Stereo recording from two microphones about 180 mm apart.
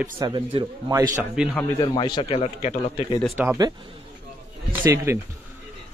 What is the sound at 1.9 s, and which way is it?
A man's voice, 25° left (ahead or behind).